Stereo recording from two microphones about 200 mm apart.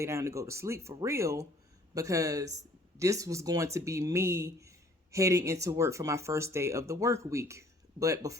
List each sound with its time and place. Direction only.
0.0 s speech: 15° right (ahead or behind)